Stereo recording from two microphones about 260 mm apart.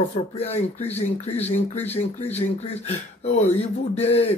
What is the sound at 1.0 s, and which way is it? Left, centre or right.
Speech, left.